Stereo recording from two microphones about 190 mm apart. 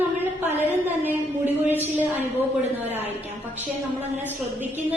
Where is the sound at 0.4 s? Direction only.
10° right (ahead or behind).